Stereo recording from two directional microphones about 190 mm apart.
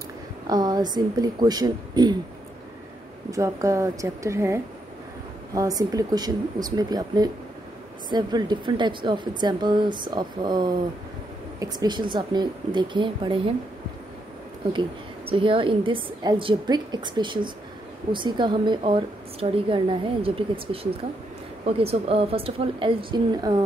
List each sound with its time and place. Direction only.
0.5 s a woman's voice: 20° right (ahead or behind)
3.3 s a woman's voice: 15° right (ahead or behind)
14.7 s a woman's voice: 25° right (ahead or behind)